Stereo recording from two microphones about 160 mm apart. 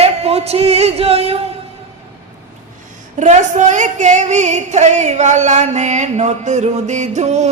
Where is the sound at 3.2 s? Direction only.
45° right (ahead or behind).